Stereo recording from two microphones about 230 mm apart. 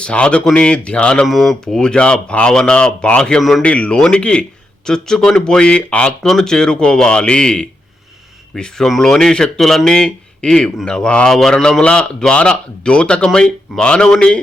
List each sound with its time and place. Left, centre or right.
0.0 s speech: centre